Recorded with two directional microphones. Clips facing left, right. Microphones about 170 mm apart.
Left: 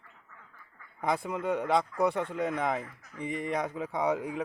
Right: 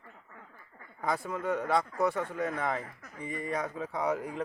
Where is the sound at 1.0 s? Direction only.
15° left (ahead or behind).